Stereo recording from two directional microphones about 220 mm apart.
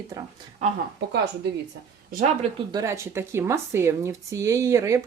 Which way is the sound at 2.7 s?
15° right (ahead or behind).